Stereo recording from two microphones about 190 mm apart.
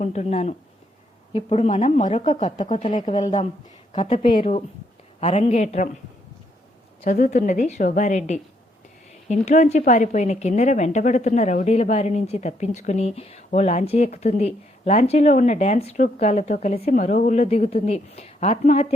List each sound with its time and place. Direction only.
0.0 s a woman's voice: 35° left (ahead or behind)
7.0 s a woman's voice: 35° left (ahead or behind)